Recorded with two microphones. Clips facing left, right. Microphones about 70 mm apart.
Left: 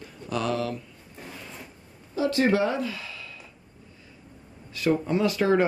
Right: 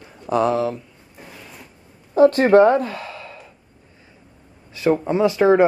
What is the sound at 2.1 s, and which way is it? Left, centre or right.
Speech, right.